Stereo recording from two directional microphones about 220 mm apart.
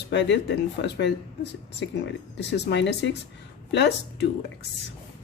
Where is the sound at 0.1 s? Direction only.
50° left (ahead or behind).